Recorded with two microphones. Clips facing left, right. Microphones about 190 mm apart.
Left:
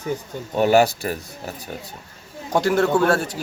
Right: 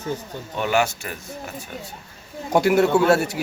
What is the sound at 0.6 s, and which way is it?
Speech, 35° left (ahead or behind).